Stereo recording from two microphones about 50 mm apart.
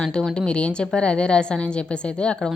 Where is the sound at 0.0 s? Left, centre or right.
Centre.